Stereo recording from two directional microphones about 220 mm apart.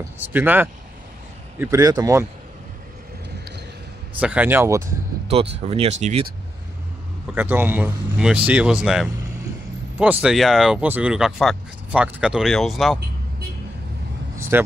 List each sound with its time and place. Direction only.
0.2 s speech: 10° right (ahead or behind)
4.2 s speech: 5° right (ahead or behind)
5.3 s speech: 25° right (ahead or behind)
7.3 s speech: 10° right (ahead or behind)
14.5 s speech: 10° right (ahead or behind)